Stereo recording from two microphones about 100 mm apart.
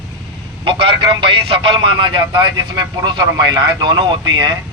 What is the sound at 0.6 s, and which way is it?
Speech, 60° right (ahead or behind).